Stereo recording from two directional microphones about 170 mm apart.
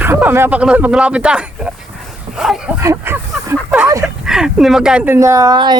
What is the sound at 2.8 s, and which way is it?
Speech, 15° right (ahead or behind).